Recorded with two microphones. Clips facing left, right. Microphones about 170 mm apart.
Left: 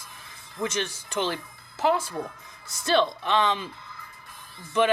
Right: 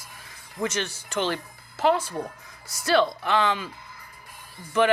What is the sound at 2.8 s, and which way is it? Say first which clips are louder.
Speech: right 1 dB; 20° left (ahead or behind).